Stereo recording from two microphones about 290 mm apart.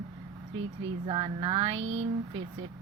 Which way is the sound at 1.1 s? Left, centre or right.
Centre.